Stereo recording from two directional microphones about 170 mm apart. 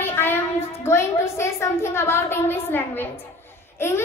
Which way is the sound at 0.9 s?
15° left (ahead or behind).